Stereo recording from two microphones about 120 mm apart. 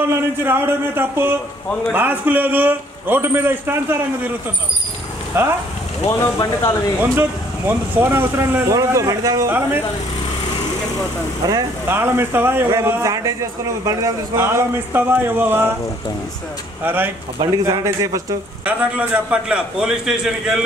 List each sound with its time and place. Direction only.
0.1 s a man's voice: 20° right (ahead or behind)
5.4 s a man's voice: 15° right (ahead or behind)
6.3 s speech: 30° left (ahead or behind)
7.0 s a man's voice: 20° right (ahead or behind)
9.5 s a man's voice: 15° right (ahead or behind)
11.4 s a man's voice: 30° right (ahead or behind)
12.0 s a man's voice: 20° right (ahead or behind)
16.8 s a man's voice: 15° right (ahead or behind)
17.5 s a man's voice: 25° right (ahead or behind)
19.5 s a man's voice: 5° right (ahead or behind)